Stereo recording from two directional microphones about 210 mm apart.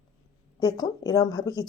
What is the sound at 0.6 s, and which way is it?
Speech, 20° left (ahead or behind).